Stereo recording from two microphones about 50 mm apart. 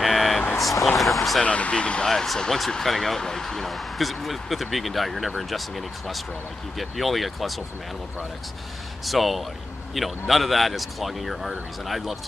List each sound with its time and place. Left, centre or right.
0.0 s vehicle: centre
0.6 s a sound: centre
1.4 s speech: left
2.0 s speech: centre
9.0 s speech: centre